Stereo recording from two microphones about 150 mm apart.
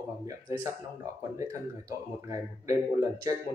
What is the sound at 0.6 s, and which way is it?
Speech, 20° right (ahead or behind).